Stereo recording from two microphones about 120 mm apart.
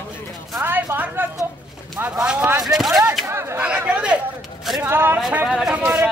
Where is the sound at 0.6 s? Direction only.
15° right (ahead or behind).